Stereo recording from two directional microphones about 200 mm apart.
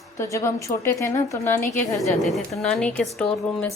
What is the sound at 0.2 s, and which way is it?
A woman's voice, 15° left (ahead or behind).